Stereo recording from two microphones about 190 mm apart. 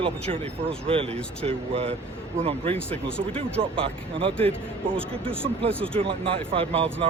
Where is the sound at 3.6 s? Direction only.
30° right (ahead or behind).